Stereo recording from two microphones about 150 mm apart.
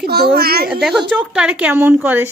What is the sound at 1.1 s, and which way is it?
A woman's voice, 5° right (ahead or behind).